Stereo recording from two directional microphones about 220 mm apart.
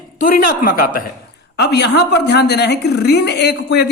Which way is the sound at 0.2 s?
40° left (ahead or behind).